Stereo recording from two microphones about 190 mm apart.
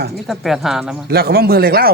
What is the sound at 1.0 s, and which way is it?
Speech, 55° right (ahead or behind).